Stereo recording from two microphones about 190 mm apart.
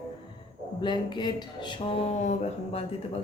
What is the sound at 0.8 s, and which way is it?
Speech, 25° left (ahead or behind).